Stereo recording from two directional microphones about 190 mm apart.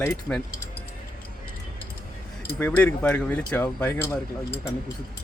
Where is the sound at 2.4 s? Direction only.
10° left (ahead or behind).